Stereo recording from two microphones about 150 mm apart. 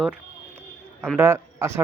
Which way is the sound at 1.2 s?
15° right (ahead or behind).